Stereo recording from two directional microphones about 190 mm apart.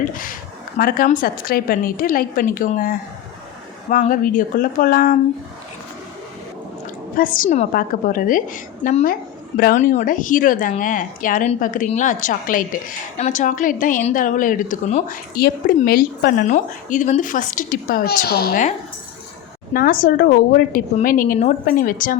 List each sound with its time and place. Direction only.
0.0 s speech: 45° left (ahead or behind)
7.2 s speech: 45° left (ahead or behind)
19.7 s speech: 50° left (ahead or behind)